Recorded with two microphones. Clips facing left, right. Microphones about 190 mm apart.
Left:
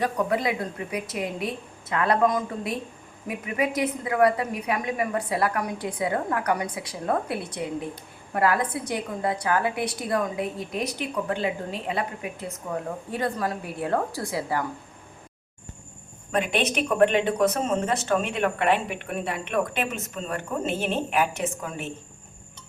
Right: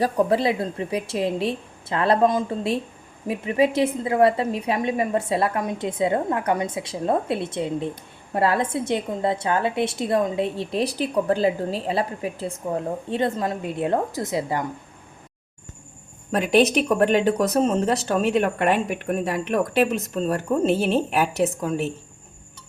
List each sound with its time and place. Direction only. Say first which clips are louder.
0.0 s a woman's voice: right 5 dB; 30° right (ahead or behind)
17.0 s speech: left 1 dB; 40° right (ahead or behind)